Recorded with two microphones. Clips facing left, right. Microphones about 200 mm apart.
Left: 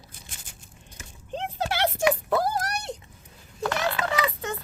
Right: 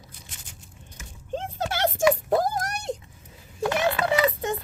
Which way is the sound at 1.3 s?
45° right (ahead or behind).